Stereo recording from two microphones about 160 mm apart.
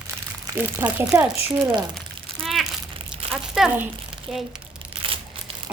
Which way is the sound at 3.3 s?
Centre (ahead or behind).